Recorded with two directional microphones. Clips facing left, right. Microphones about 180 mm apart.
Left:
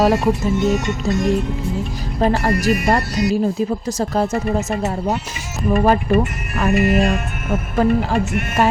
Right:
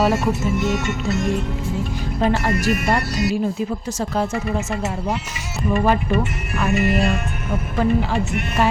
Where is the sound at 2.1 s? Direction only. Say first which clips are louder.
Left 3 dB; 40° left (ahead or behind).